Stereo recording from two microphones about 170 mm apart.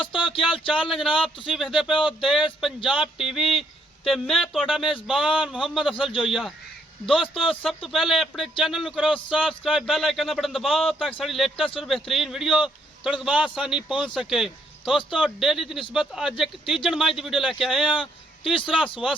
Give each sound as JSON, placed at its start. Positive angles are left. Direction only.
{"t": 0.3, "sound": "speech", "side_deg": 30}
{"t": 0.9, "sound": "a man's voice", "side_deg": 0}